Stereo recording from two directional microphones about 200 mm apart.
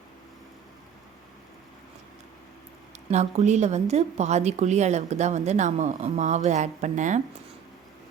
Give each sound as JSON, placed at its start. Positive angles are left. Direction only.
{"t": 3.1, "sound": "a woman's voice", "side_deg": -35}